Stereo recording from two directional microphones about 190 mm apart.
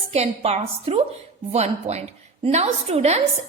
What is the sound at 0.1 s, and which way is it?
A woman's voice, 35° right (ahead or behind).